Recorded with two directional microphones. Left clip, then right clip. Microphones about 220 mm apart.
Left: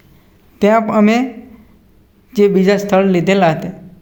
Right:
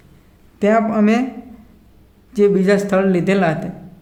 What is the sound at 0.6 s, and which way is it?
Speech, 20° left (ahead or behind).